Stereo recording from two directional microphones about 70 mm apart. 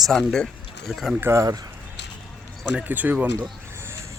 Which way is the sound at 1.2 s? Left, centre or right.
Right.